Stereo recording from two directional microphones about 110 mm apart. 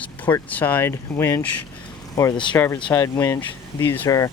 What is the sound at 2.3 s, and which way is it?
Speech, 45° left (ahead or behind).